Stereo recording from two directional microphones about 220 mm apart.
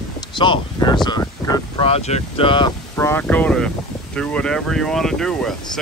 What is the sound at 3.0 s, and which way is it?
Speech, 10° left (ahead or behind).